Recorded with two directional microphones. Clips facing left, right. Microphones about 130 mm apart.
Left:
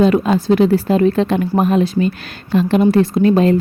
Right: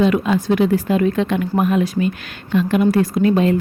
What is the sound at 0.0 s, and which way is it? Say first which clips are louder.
Speech: left 3 dB; 35° left (ahead or behind).